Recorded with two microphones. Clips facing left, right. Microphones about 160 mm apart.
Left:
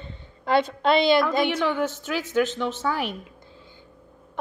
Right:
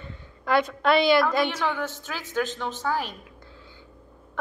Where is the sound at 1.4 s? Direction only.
55° left (ahead or behind).